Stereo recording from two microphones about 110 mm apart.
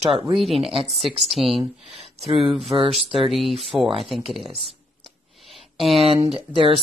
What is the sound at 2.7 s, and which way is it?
Speech, 40° right (ahead or behind).